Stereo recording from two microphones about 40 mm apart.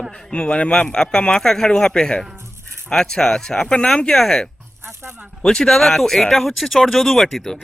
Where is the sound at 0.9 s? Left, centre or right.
Centre.